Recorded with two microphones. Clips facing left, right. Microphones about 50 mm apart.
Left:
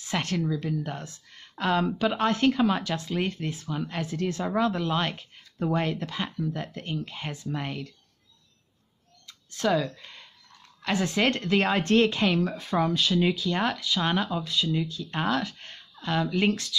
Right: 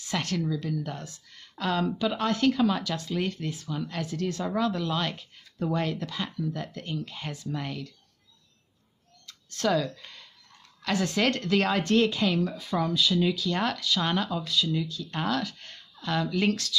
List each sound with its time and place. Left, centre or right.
0.0 s speech: left
9.2 s a woman's voice: centre; by 13.1 s left
13.1 s a woman's voice: left
13.5 s speech: centre